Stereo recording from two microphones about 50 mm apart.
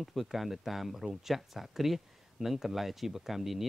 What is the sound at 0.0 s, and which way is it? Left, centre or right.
Speech, centre.